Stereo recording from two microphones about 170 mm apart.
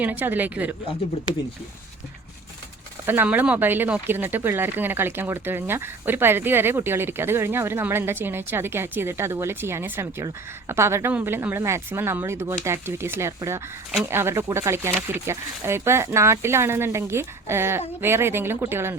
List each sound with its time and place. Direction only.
0.0 s speech: 10° right (ahead or behind)
3.1 s speech: 10° right (ahead or behind)